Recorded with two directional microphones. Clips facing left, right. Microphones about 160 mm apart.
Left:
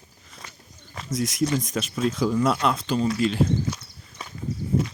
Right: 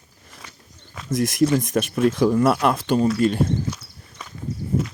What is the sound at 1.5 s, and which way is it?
Speech, 60° right (ahead or behind).